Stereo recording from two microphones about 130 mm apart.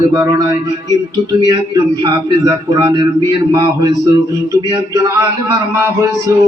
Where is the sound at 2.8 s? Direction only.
30° right (ahead or behind).